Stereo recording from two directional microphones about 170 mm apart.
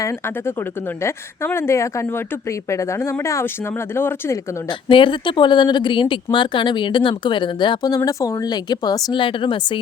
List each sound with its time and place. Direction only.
1.0 s speech: 15° left (ahead or behind)
4.9 s speech: 30° left (ahead or behind)